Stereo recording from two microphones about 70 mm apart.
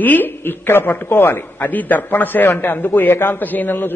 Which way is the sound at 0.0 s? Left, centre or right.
Left.